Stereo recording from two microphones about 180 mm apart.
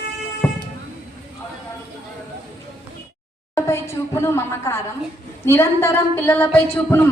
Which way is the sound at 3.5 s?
15° left (ahead or behind).